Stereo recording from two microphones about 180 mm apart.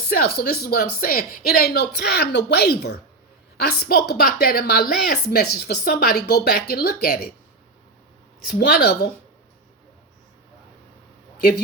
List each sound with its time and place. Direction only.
0.1 s a woman's voice: 55° left (ahead or behind)
8.5 s a woman's voice: 60° left (ahead or behind)